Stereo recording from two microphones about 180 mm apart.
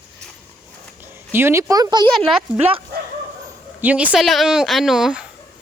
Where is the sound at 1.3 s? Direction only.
15° right (ahead or behind).